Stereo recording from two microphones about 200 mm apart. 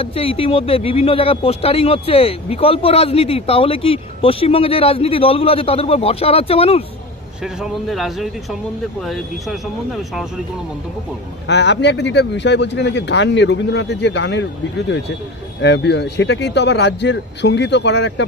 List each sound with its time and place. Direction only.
0.0 s speech: 30° left (ahead or behind)
7.6 s speech: centre (ahead or behind)
11.4 s speech: 60° left (ahead or behind)